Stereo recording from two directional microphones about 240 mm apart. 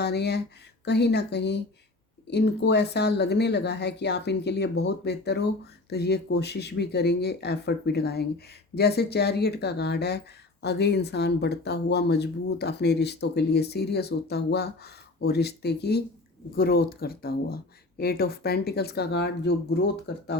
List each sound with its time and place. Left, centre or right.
0.0 s speech: left